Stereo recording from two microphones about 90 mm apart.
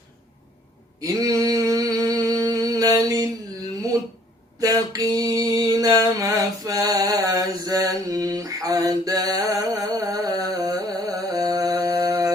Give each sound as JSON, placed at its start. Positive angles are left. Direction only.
{"t": 1.0, "sound": "mantra", "side_deg": -40}
{"t": 4.6, "sound": "mantra", "side_deg": -45}
{"t": 11.9, "sound": "mantra", "side_deg": -25}